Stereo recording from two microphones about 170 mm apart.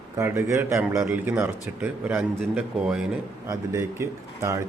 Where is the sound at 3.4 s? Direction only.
15° right (ahead or behind).